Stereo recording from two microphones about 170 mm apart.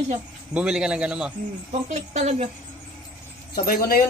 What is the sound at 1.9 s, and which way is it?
Speech, 40° right (ahead or behind).